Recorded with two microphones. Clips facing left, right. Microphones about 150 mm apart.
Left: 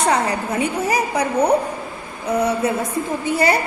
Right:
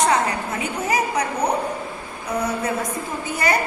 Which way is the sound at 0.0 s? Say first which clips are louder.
Left 1 dB; 35° left (ahead or behind).